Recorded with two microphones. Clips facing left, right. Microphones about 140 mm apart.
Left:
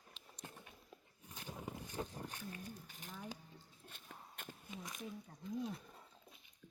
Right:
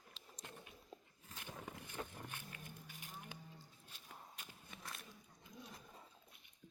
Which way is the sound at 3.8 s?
50° left (ahead or behind).